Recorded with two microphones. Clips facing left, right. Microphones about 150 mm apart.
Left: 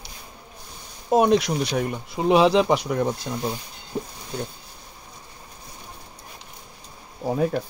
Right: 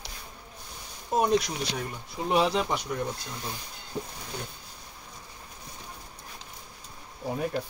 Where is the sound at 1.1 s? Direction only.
85° left.